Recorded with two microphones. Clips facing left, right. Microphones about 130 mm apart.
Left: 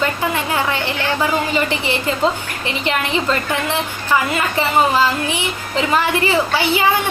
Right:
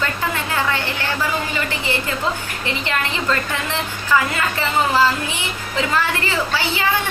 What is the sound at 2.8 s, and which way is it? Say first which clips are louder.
A woman's voice: left 4 dB; 20° left (ahead or behind).